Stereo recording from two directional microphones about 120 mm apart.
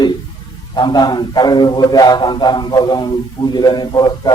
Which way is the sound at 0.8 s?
35° left (ahead or behind).